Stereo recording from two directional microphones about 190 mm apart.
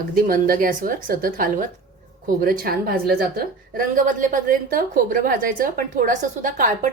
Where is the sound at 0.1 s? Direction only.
50° right (ahead or behind).